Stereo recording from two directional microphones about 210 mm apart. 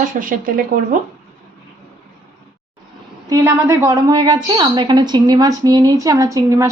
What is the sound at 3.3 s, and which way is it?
A woman's voice, 15° right (ahead or behind).